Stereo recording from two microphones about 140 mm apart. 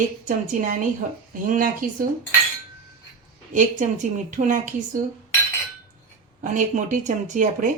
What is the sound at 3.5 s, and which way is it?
Speech, 60° right (ahead or behind).